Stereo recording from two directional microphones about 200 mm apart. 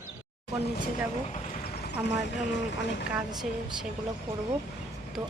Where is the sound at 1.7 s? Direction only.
50° left (ahead or behind).